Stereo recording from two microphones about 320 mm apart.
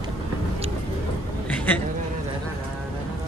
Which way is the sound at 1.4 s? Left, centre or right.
Centre.